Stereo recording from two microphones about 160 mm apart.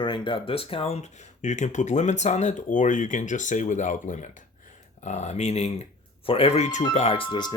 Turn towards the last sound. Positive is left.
turn(degrees=30)  # may be behind; listen again after turning